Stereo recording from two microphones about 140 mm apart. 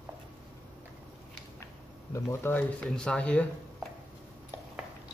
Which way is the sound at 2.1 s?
15° left (ahead or behind).